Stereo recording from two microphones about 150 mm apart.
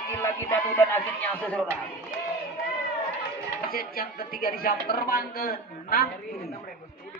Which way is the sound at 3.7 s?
80° left.